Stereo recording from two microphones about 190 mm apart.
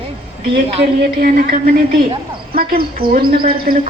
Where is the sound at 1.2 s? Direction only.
50° right (ahead or behind).